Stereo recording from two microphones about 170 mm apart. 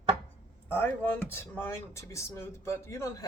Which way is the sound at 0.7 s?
10° left (ahead or behind).